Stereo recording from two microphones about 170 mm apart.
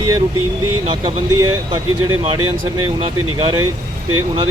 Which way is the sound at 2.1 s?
20° right (ahead or behind).